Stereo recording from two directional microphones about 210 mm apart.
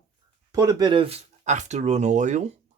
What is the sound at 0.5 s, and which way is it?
Speech, 15° right (ahead or behind).